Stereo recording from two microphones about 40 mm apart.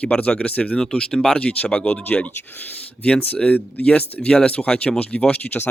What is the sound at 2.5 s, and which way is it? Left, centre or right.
Speech, left.